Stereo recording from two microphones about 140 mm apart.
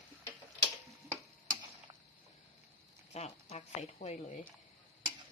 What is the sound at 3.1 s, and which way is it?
Speech, 50° left (ahead or behind).